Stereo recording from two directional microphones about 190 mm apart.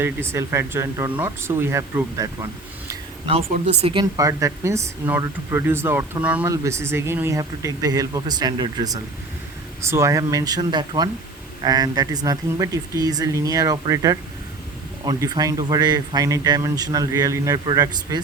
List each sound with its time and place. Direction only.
0.0 s speech: 15° right (ahead or behind)
3.5 s speech: 35° right (ahead or behind)
4.2 s speech: 15° right (ahead or behind)